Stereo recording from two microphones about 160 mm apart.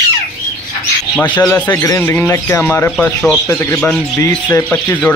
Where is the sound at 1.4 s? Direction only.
10° left (ahead or behind).